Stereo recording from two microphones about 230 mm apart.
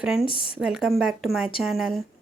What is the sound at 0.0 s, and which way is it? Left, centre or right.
Speech, centre.